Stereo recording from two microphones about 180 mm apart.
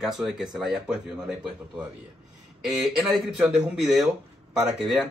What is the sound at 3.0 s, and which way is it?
Speech, centre (ahead or behind).